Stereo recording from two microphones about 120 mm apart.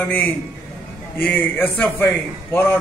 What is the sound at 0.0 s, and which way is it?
A man's voice, 15° left (ahead or behind).